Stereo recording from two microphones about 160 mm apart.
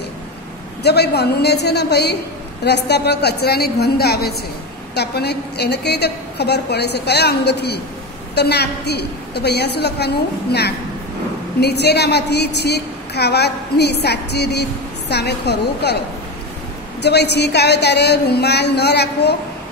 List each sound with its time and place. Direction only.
0.8 s a woman's voice: 90° left
4.9 s a woman's voice: 90° left
17.0 s a woman's voice: 90° left